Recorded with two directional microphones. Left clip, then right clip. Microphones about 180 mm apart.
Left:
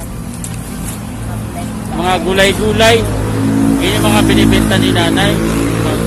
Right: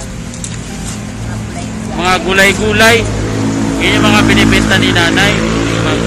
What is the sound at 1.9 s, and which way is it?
Speech, 15° left (ahead or behind).